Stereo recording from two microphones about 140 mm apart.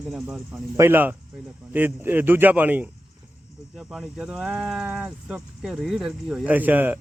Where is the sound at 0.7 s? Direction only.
15° right (ahead or behind).